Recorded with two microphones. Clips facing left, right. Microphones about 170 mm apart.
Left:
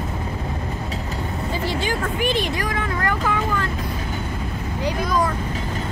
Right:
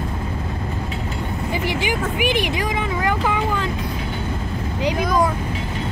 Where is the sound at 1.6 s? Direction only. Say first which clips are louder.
Right 1 dB; 15° right (ahead or behind).